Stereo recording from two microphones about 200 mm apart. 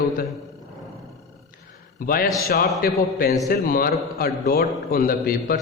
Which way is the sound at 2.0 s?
45° left (ahead or behind).